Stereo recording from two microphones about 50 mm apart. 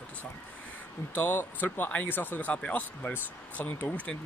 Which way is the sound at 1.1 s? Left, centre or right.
Left.